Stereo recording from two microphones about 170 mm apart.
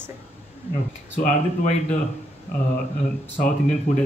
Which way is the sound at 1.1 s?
45° left (ahead or behind).